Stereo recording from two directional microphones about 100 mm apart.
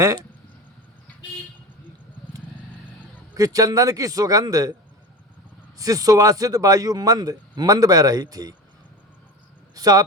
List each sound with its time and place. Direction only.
3.3 s speech: 35° right (ahead or behind)
5.7 s speech: 35° right (ahead or behind)
9.7 s speech: 40° right (ahead or behind)